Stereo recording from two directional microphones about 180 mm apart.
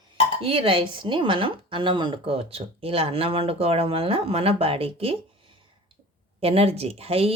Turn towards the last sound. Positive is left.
turn(degrees=-35)  # may be behind; listen again after turning